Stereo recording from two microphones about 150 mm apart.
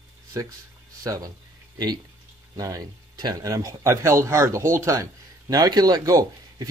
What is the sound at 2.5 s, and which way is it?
Speech, 25° right (ahead or behind).